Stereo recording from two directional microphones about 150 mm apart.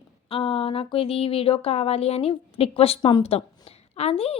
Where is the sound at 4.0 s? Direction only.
40° left (ahead or behind).